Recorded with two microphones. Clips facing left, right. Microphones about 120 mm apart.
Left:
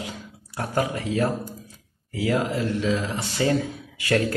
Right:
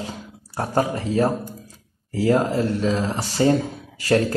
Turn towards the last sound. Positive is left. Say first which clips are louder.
# right 4 dB
turn(degrees=-35)  # may be behind; listen again after turning